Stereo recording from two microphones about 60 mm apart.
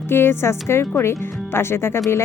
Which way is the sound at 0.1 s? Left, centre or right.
Left.